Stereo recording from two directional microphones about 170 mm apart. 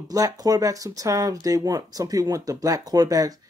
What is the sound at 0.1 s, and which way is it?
Speech, 20° right (ahead or behind).